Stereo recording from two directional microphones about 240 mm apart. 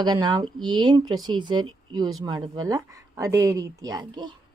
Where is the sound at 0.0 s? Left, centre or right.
Centre.